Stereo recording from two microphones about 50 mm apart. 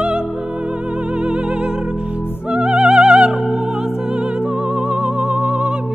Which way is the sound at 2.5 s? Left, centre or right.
Centre.